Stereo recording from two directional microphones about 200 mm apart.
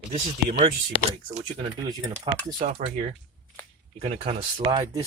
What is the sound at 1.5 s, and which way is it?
Speech, 25° right (ahead or behind).